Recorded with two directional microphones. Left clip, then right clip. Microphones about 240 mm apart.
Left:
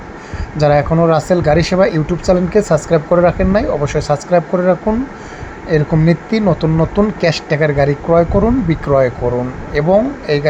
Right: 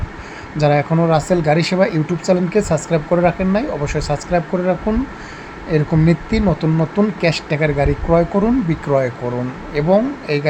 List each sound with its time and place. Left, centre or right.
0.5 s speech: centre